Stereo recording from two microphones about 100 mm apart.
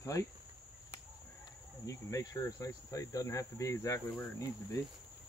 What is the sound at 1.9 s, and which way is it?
Cricket, 35° left (ahead or behind).